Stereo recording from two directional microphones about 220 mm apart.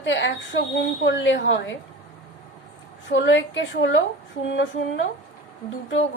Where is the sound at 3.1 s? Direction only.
55° left (ahead or behind).